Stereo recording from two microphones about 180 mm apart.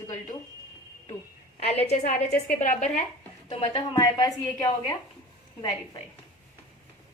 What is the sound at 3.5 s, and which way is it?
A woman's voice, 30° left (ahead or behind).